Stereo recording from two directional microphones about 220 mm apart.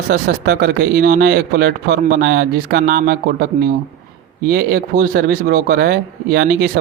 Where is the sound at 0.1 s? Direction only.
45° right (ahead or behind).